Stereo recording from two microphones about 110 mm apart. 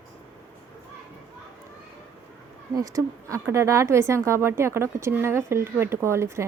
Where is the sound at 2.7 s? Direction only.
30° right (ahead or behind).